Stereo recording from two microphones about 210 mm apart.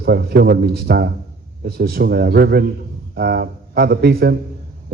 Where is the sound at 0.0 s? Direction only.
50° right (ahead or behind).